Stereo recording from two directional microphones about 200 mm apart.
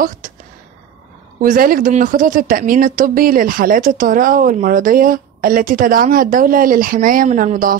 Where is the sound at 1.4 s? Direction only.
45° right (ahead or behind).